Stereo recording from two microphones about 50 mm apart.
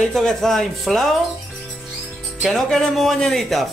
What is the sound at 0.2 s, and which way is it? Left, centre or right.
Speech, centre.